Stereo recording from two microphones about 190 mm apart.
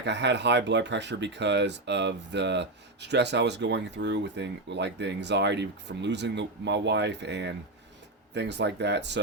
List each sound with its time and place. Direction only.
0.0 s speech: 65° right (ahead or behind)